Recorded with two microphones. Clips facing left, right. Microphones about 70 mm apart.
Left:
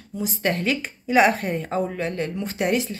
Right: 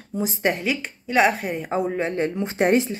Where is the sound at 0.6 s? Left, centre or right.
Centre; by 2.9 s right.